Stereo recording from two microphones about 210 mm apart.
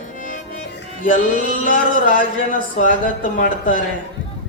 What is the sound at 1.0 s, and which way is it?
A man's voice, 40° left (ahead or behind).